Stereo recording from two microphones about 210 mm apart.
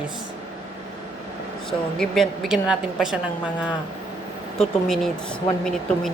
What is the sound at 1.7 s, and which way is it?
A woman's voice, centre (ahead or behind).